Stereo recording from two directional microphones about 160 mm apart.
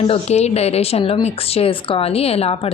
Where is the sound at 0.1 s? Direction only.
40° left (ahead or behind).